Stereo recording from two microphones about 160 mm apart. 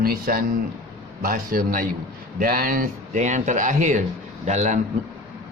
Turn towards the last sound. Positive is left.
turn(degrees=-45)  # may be behind; listen again after turning